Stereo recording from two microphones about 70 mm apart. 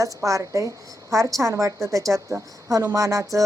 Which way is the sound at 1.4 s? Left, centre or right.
Right.